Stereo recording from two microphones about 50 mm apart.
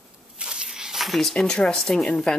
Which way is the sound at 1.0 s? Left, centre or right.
Centre.